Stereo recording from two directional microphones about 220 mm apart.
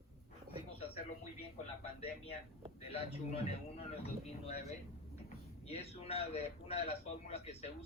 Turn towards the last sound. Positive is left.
turn(degrees=25)  # may be behind; listen again after turning